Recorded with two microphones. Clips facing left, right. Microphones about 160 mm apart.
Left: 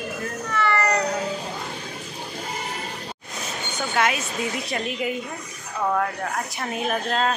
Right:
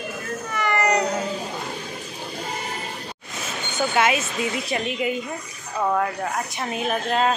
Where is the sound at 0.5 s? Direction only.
15° right (ahead or behind).